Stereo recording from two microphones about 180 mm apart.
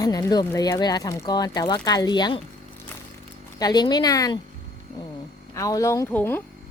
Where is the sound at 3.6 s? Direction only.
25° left (ahead or behind).